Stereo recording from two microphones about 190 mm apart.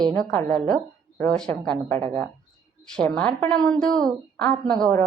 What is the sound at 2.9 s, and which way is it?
A woman's voice, 5° left (ahead or behind).